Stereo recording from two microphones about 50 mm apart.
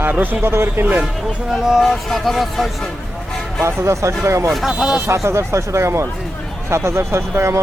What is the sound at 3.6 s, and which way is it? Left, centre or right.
Speech, right.